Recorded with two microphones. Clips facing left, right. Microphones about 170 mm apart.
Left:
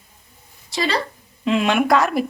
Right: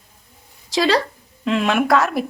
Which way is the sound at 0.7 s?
90° right.